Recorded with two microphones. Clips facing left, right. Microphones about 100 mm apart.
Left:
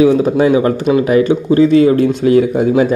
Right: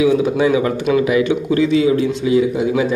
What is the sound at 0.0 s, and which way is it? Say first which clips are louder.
Speech: left 4 dB; 40° left (ahead or behind).